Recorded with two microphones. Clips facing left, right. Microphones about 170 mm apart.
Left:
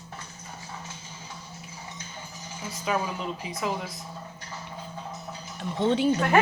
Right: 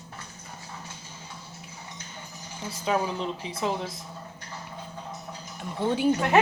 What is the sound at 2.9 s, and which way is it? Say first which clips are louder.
Speech: right 2 dB; 30° right (ahead or behind).